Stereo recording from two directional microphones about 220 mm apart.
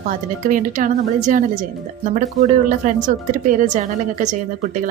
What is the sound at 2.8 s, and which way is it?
Speech, 40° right (ahead or behind).